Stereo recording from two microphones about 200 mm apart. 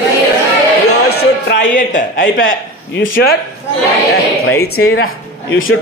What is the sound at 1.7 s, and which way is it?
Speech, 40° left (ahead or behind).